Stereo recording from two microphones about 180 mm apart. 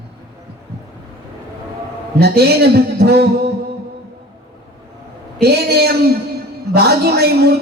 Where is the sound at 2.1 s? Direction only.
65° right (ahead or behind).